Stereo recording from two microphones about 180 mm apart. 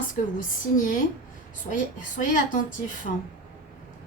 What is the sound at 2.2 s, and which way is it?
Speech, 45° left (ahead or behind).